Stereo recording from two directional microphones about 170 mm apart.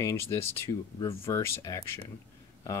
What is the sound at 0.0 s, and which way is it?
Speech, 15° left (ahead or behind).